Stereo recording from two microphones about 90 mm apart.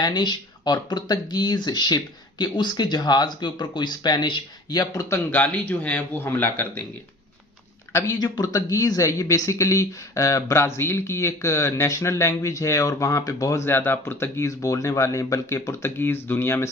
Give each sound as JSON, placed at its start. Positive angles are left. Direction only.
{"t": 0.0, "sound": "speech", "side_deg": 55}
{"t": 5.0, "sound": "a man's voice", "side_deg": 30}
{"t": 5.4, "sound": "a man's voice", "side_deg": 20}
{"t": 8.2, "sound": "speech", "side_deg": 40}